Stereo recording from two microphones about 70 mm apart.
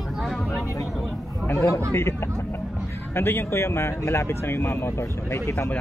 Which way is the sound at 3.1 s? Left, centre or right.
Left.